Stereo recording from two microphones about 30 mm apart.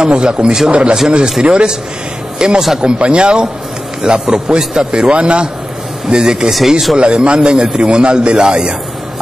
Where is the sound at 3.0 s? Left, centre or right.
Right.